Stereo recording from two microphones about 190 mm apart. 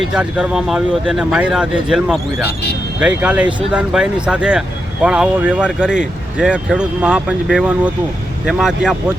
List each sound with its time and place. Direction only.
0.1 s speech: 5° right (ahead or behind)